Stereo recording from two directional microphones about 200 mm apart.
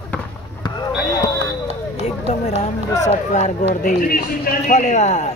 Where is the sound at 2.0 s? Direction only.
30° left (ahead or behind).